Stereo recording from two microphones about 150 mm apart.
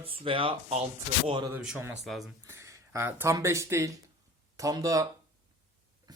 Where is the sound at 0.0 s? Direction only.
35° right (ahead or behind).